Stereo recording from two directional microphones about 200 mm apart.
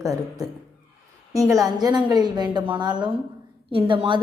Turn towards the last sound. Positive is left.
turn(degrees=-25)  # may be behind; listen again after turning